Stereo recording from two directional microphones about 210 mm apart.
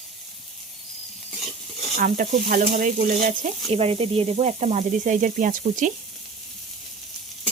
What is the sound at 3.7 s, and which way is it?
Sizzle, 30° right (ahead or behind).